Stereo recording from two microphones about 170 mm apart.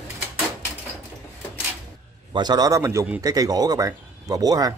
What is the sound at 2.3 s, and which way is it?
A man's voice, 25° right (ahead or behind).